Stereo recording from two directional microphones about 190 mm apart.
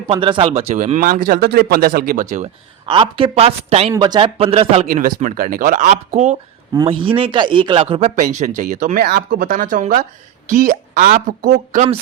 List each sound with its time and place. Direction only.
0.1 s speech: 25° right (ahead or behind); by 2.5 s 40° right (ahead or behind)
2.8 s speech: 25° right (ahead or behind)
3.9 s speech: 20° right (ahead or behind); by 6.3 s 40° right (ahead or behind)
6.7 s speech: 25° right (ahead or behind)